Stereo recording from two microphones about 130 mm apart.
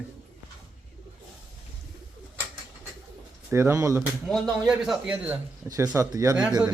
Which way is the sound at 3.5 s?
20° right (ahead or behind).